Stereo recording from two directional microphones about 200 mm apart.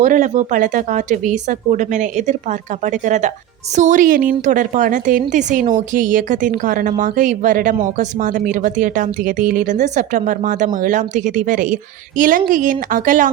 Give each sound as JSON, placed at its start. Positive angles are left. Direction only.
{"t": 0.0, "sound": "a woman's voice", "side_deg": -40}